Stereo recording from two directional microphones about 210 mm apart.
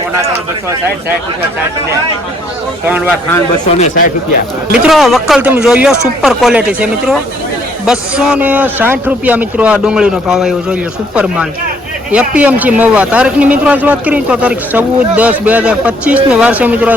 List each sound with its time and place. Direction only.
3.8 s speech: 35° left (ahead or behind)
4.7 s a man's voice: centre (ahead or behind)